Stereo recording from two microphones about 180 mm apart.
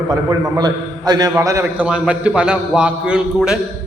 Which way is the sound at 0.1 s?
20° right (ahead or behind).